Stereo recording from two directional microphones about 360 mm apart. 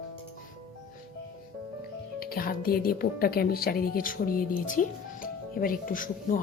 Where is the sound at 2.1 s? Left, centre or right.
Left.